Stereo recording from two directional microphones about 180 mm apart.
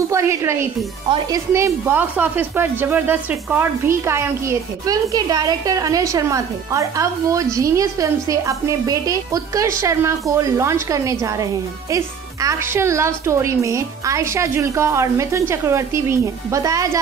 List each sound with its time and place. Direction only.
0.1 s a woman's voice: 15° right (ahead or behind)